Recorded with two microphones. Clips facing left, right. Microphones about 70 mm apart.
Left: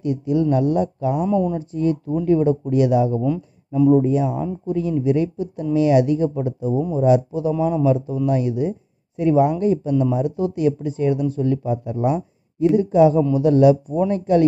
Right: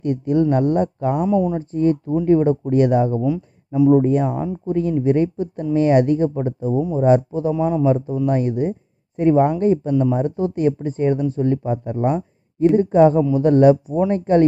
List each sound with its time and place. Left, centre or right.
0.0 s speech: right
1.2 s speech: centre
1.6 s speech: right
3.2 s speech: centre
3.9 s speech: right
7.5 s speech: centre
7.8 s speech: right